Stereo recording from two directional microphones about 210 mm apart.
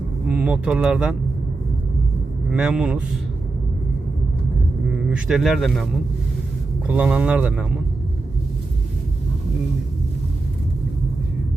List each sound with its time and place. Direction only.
0.3 s speech: 5° right (ahead or behind)
2.5 s speech: 5° right (ahead or behind)
4.9 s speech: 5° right (ahead or behind)